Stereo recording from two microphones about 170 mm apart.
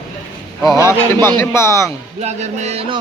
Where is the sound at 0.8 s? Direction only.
15° left (ahead or behind).